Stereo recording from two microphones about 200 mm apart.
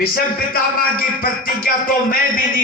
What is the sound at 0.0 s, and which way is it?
Music, 45° left (ahead or behind).